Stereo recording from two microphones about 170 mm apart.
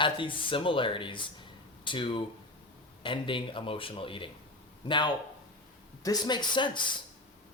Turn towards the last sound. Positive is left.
turn(degrees=25)  # may be behind; listen again after turning